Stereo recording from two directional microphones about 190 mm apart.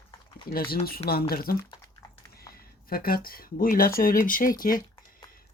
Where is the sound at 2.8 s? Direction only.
50° left (ahead or behind).